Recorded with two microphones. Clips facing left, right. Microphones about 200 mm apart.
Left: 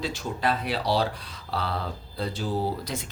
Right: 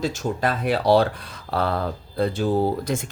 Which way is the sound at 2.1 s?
55° right (ahead or behind).